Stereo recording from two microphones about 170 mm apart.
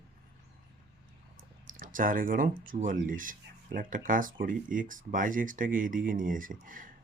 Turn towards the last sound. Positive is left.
turn(degrees=-50)  # may be behind; listen again after turning